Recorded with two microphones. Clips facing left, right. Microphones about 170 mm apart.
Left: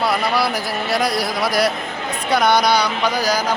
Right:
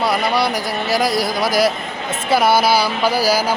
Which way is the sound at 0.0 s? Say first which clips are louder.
Right 1 dB; centre (ahead or behind).